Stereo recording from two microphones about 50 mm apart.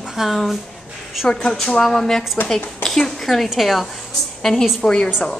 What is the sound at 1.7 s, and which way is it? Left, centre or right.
A woman's voice, centre.